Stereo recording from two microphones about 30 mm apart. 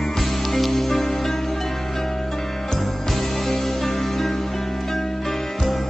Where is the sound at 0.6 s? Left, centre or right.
Centre.